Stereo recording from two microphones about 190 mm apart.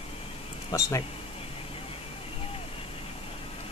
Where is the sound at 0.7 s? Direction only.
20° left (ahead or behind).